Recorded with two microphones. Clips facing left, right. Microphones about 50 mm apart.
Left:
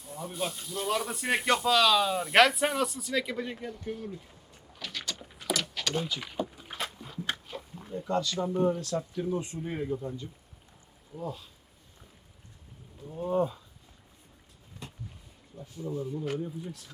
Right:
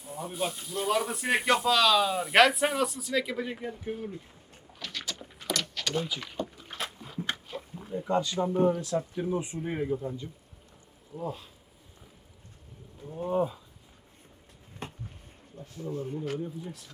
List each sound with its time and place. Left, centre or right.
0.0 s speech: centre
4.7 s a sound: centre
6.1 s speech: centre
6.7 s a sound: centre
8.0 s speech: centre
11.1 s speech: centre
13.1 s speech: centre
14.8 s a sound: right
15.5 s speech: centre